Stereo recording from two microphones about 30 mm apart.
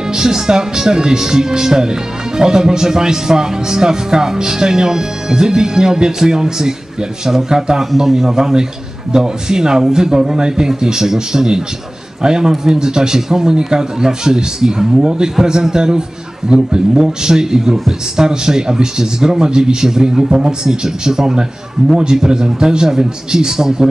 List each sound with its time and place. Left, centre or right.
0.1 s speech: right
7.8 s a man's voice: centre